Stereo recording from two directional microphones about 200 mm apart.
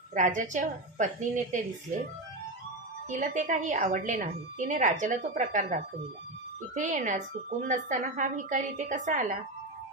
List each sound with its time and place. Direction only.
0.1 s a woman's voice: 40° right (ahead or behind)
3.1 s a woman's voice: 40° right (ahead or behind)